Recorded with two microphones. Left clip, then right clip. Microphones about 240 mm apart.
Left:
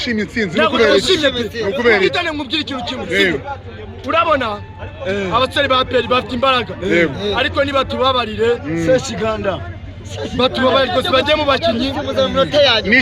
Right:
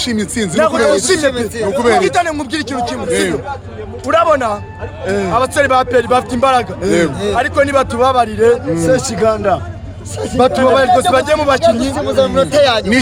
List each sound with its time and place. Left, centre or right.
0.0 s a man's voice: centre
0.5 s a man's voice: centre
1.3 s a man's voice: centre
2.0 s a man's voice: centre
3.1 s a man's voice: centre
6.9 s speech: centre
7.3 s a man's voice: centre
9.2 s a man's voice: centre
10.3 s a man's voice: centre
12.0 s speech: centre